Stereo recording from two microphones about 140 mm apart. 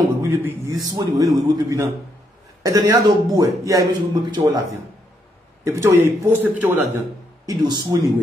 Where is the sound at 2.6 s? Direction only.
25° right (ahead or behind).